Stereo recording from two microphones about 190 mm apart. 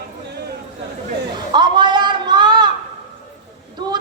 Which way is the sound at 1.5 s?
25° right (ahead or behind).